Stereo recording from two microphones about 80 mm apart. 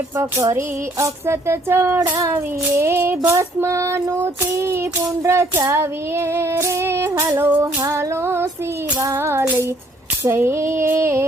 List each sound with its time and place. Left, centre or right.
0.2 s child singing: right